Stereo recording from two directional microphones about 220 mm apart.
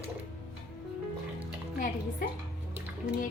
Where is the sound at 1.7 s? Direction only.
40° left (ahead or behind).